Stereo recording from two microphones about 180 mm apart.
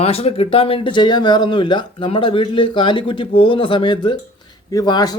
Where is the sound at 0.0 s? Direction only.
35° left (ahead or behind).